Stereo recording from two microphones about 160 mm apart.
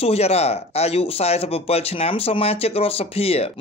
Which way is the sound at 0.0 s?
40° left (ahead or behind).